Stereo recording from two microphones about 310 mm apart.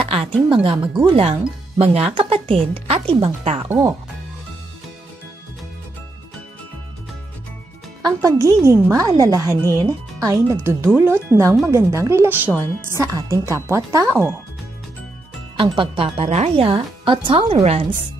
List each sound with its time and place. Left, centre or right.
0.0 s a sound: centre
0.5 s speech: centre
8.0 s speech: centre
15.5 s speech: centre